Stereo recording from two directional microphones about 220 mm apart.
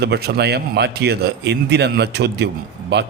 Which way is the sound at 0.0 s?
50° right (ahead or behind).